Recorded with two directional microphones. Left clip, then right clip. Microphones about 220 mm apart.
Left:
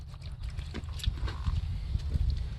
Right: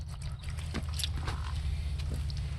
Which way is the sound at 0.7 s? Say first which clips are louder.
Right 3 dB; 30° right (ahead or behind).